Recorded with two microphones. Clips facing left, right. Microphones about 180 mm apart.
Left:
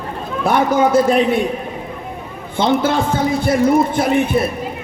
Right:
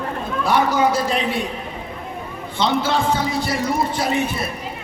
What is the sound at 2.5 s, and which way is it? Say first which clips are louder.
Speech: left 4 dB; 50° left (ahead or behind).